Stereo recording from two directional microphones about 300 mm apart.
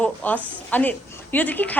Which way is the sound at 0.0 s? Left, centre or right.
Centre.